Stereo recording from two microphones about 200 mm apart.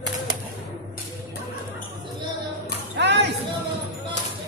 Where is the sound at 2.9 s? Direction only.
60° right (ahead or behind).